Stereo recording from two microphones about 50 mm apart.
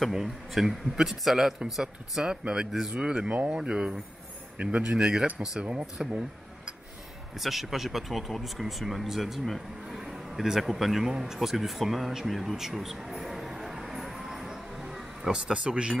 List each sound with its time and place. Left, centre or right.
0.1 s speech: centre
2.2 s speech: centre
4.8 s speech: centre
7.3 s speech: centre
11.3 s a sound: centre; by 16.0 s right